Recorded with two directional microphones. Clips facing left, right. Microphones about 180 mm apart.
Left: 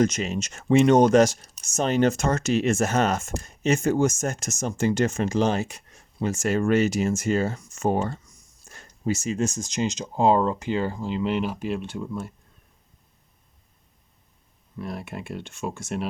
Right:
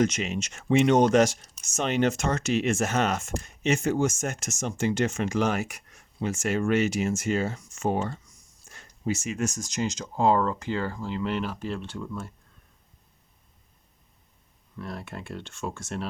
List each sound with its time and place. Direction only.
0.0 s speech: 40° left (ahead or behind)
6.1 s speech: 40° left (ahead or behind); by 12.3 s 15° left (ahead or behind)
14.8 s speech: 15° left (ahead or behind)